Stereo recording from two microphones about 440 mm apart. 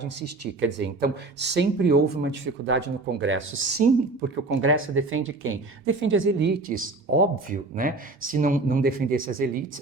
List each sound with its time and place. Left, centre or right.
0.2 s speech: right